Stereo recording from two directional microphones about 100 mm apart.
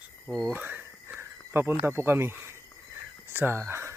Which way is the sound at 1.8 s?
25° right (ahead or behind).